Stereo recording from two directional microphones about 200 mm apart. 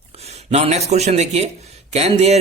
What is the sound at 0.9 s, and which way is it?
Speech, 35° right (ahead or behind).